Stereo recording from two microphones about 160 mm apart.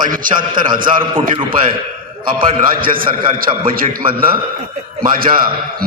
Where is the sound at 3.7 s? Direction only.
65° right (ahead or behind).